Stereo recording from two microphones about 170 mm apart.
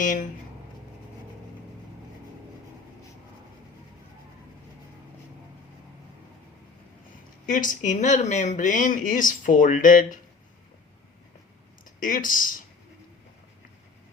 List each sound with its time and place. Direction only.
0.0 s speech: 50° left (ahead or behind)
7.4 s speech: 50° left (ahead or behind)
11.9 s speech: 55° left (ahead or behind)